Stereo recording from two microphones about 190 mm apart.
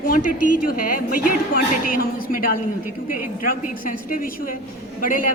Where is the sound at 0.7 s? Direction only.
50° left (ahead or behind).